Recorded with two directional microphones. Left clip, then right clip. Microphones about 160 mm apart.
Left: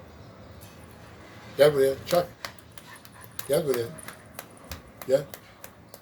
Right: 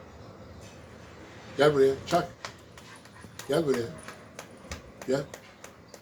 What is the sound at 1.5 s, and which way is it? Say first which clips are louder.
Speech: left 2 dB; 20° right (ahead or behind).